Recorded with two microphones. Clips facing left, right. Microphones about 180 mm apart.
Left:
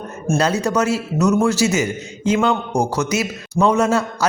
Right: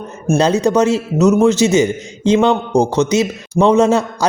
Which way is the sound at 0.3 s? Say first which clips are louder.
Right 5 dB; 30° right (ahead or behind).